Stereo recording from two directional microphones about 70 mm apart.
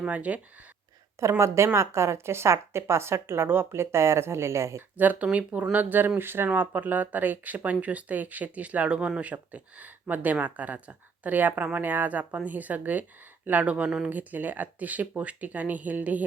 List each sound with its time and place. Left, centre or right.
0.0 s speech: centre
1.2 s a woman's voice: right
4.9 s speech: right